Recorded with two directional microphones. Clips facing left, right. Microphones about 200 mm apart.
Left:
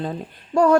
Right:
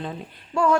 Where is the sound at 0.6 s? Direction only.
40° left (ahead or behind).